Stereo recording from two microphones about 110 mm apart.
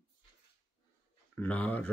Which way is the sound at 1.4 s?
15° left (ahead or behind).